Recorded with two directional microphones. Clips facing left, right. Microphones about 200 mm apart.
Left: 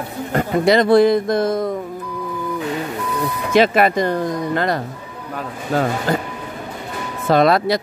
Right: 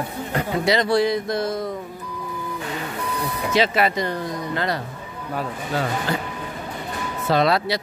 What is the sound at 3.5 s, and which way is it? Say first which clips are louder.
A man's voice: left 6 dB; 55° left (ahead or behind).